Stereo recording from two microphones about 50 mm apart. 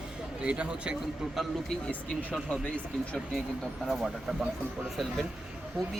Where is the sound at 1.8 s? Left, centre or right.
Left.